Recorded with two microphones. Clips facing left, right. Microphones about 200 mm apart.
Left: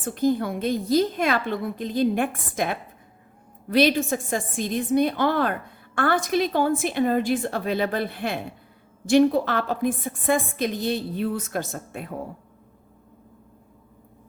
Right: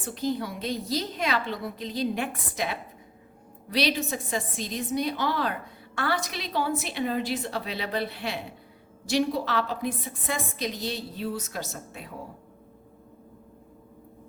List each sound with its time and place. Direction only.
0.0 s a woman's voice: 50° left (ahead or behind)